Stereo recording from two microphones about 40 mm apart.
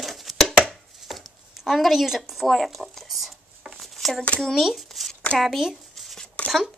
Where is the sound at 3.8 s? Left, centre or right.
Centre.